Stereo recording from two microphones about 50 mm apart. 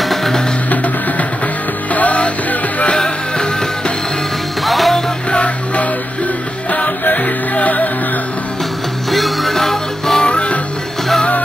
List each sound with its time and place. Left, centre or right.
0.0 s music: centre
2.0 s music: left
3.0 s music: centre
4.6 s music: centre
5.3 s music: left
9.1 s music: centre
10.2 s music: left